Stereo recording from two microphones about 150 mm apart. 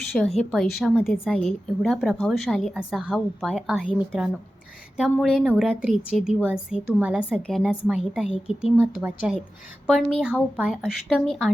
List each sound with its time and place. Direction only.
0.1 s a woman's voice: centre (ahead or behind)
7.4 s speech: 5° left (ahead or behind)
8.3 s speech: 40° left (ahead or behind)
8.8 s a woman's voice: 10° right (ahead or behind)